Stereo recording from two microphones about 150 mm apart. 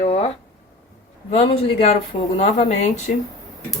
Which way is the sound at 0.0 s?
45° left (ahead or behind).